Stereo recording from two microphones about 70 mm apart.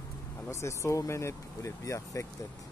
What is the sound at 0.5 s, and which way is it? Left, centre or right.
Speech, left.